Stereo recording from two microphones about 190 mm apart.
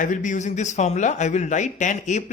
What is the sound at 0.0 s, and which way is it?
Speech, 40° left (ahead or behind).